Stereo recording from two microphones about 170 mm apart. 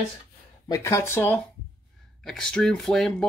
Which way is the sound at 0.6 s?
20° left (ahead or behind).